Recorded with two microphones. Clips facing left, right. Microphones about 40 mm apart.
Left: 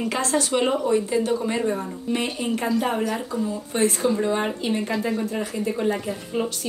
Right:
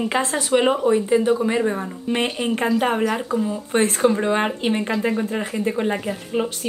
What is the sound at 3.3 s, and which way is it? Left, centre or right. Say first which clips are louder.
A woman's voice: right 5 dB; right.